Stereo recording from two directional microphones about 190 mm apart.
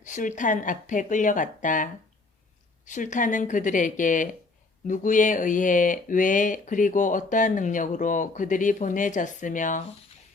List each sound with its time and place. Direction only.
0.0 s speech: 40° left (ahead or behind)